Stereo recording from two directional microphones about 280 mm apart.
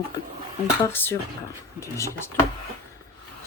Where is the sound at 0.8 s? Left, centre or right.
Centre.